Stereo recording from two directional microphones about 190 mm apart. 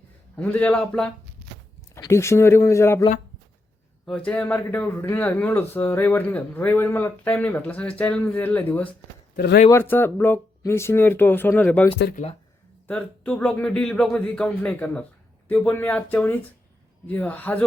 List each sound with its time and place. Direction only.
0.3 s speech: 5° left (ahead or behind)
9.3 s speech: 60° left (ahead or behind)
9.6 s speech: 10° left (ahead or behind)